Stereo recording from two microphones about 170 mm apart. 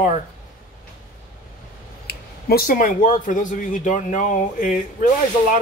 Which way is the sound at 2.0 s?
65° left (ahead or behind).